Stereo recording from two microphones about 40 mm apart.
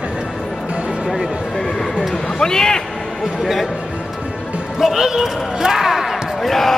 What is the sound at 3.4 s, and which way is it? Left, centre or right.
Music, centre.